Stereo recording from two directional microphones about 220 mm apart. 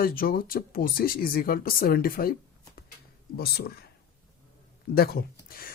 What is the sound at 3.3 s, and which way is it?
Speech, 45° left (ahead or behind).